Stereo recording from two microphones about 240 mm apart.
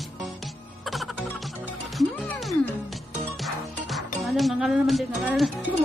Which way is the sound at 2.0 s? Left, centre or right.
Centre.